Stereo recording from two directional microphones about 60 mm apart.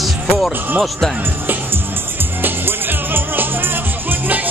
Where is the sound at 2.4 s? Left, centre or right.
Right.